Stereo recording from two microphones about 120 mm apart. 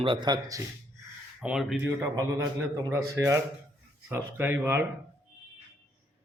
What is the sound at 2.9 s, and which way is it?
Speech, 25° right (ahead or behind).